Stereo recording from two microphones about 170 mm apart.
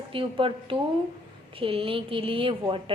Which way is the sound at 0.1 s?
30° right (ahead or behind).